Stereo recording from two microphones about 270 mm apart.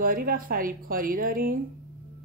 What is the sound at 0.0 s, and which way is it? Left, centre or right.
Speech, right.